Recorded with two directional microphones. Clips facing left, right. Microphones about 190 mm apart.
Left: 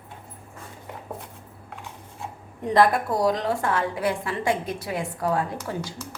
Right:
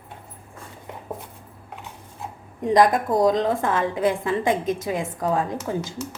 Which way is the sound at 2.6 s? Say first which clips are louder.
Right 2 dB; 20° right (ahead or behind).